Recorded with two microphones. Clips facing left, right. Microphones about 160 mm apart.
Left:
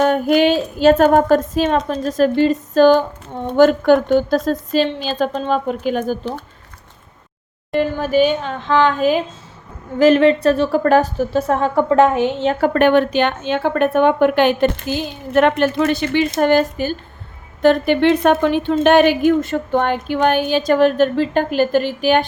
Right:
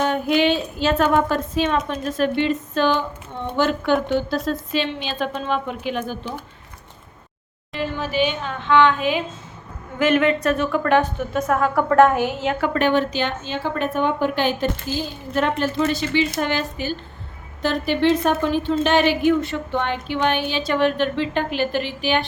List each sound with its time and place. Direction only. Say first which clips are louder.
0.0 s a woman's voice: left 5 dB; 45° left (ahead or behind)
7.7 s a woman's voice: left 8 dB; 50° left (ahead or behind)
16.4 s a woman's voice: left 9 dB; 50° left (ahead or behind)